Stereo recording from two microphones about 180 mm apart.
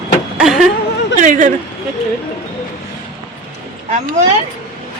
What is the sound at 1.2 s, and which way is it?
Speech, 45° right (ahead or behind).